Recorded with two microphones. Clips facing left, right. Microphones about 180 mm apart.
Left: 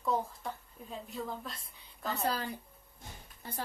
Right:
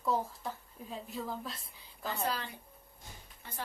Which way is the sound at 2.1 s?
40° left (ahead or behind).